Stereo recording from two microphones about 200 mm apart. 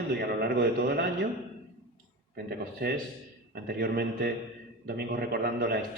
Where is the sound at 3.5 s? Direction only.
50° right (ahead or behind).